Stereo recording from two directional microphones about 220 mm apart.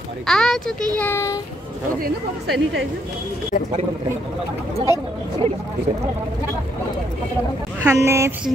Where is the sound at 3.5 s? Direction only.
35° left (ahead or behind).